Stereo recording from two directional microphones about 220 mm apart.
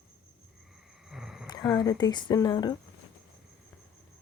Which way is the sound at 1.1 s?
Centre (ahead or behind).